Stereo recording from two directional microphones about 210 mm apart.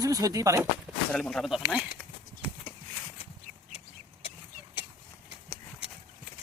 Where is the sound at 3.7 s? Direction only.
25° left (ahead or behind).